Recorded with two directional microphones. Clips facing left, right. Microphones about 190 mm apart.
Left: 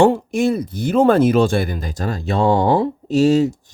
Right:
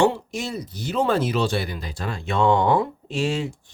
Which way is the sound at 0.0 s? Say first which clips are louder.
Left 7 dB; 55° left (ahead or behind).